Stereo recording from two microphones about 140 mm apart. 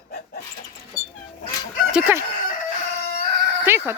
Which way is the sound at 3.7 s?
15° right (ahead or behind).